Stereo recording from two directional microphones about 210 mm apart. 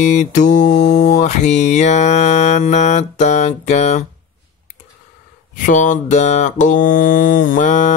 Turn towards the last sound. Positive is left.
turn(degrees=35)  # may be behind; listen again after turning